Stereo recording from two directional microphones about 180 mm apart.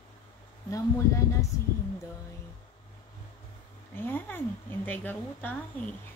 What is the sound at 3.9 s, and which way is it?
A woman's voice, 10° left (ahead or behind).